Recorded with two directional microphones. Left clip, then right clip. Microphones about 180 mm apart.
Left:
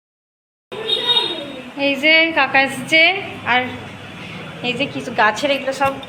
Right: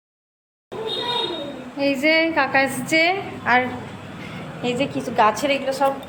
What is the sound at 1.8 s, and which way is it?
A woman's voice, 10° right (ahead or behind).